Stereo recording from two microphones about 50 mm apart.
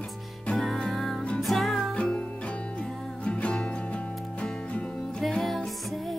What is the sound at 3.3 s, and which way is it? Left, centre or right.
Music, left.